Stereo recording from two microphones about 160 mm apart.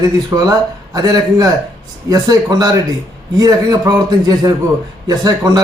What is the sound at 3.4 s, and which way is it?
Speech, 25° right (ahead or behind).